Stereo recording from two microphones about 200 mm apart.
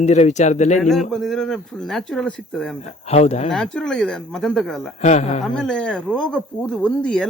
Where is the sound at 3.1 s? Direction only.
30° left (ahead or behind).